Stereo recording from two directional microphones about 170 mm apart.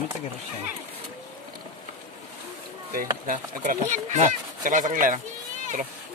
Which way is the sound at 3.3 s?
50° right (ahead or behind).